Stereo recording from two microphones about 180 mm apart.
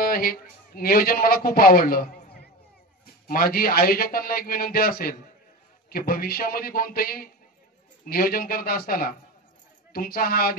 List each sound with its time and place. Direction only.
0.0 s a man's voice: 55° left (ahead or behind)